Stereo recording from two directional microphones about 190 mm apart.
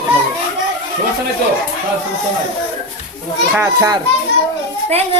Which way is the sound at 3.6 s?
20° right (ahead or behind).